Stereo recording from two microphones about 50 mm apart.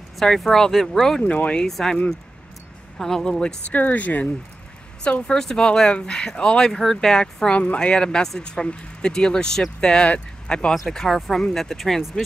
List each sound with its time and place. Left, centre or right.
0.2 s speech: centre
1.2 s speech: left
1.7 s speech: centre
3.0 s speech: centre
3.7 s speech: left
5.2 s speech: centre
10.9 s speech: centre